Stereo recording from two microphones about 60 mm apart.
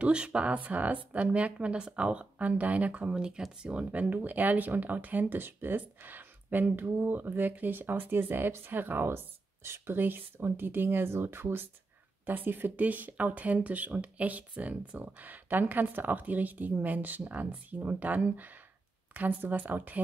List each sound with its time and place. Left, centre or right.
0.0 s speech: centre
3.2 s speech: centre; by 20.0 s right